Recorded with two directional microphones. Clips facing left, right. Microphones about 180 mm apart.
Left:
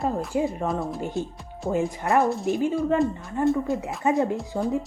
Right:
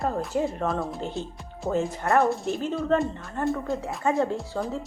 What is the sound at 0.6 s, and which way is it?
Speech, centre (ahead or behind).